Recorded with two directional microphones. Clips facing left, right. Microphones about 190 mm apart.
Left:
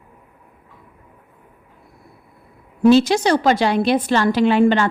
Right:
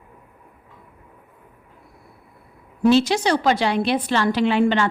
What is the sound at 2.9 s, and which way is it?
A woman's voice, 45° left (ahead or behind).